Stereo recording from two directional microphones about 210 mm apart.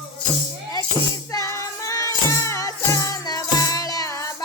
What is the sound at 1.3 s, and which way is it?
Music, 15° left (ahead or behind).